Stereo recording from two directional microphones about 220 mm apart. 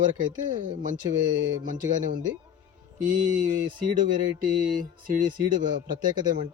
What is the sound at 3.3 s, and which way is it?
Speech, 40° right (ahead or behind).